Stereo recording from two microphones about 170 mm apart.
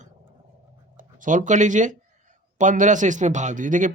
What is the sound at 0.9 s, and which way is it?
Speech, 50° right (ahead or behind).